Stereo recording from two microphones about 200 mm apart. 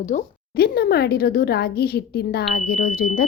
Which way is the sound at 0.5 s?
50° left (ahead or behind).